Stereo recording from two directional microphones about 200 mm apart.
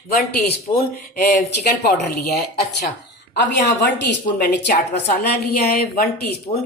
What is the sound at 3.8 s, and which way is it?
A woman's voice, 60° left (ahead or behind).